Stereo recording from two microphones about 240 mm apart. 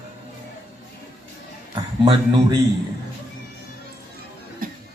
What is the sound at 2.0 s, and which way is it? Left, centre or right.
Speech, centre.